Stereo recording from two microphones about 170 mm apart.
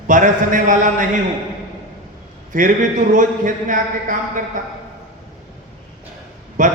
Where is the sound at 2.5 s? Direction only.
45° right (ahead or behind).